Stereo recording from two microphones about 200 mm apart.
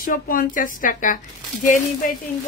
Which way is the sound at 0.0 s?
45° left (ahead or behind).